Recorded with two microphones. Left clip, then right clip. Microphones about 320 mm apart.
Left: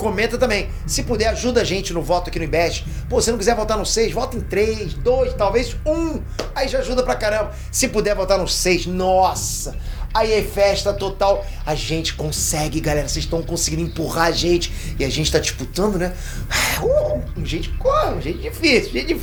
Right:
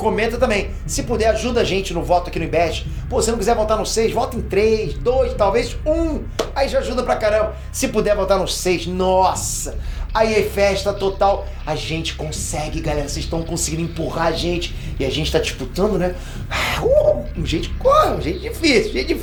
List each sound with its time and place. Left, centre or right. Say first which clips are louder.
0.0 s speech: right 1 dB; left
3.1 s speech: even; left
5.9 s speech: right 1 dB; left
6.5 s speech: right 1 dB; left
13.3 s speech: left 1 dB; left
13.9 s speech: left 1 dB; left
17.4 s speech: right 3 dB; left
18.6 s speech: even; left